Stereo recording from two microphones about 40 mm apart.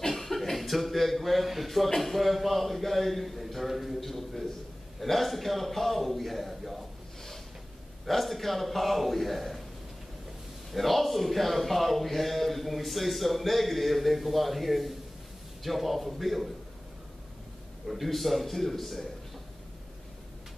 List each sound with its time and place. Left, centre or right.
0.0 s a sound: centre
2.0 s speech: centre
8.1 s speech: centre
10.7 s speech: centre
17.8 s speech: centre